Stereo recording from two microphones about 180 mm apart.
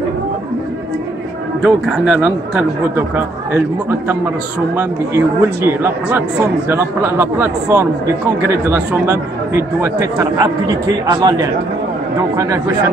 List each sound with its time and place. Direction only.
1.6 s speech: 5° right (ahead or behind)